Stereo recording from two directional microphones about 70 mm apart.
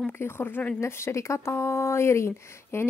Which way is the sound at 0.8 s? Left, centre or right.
Left.